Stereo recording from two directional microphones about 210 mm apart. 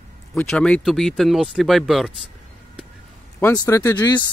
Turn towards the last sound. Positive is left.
turn(degrees=20)  # may be behind; listen again after turning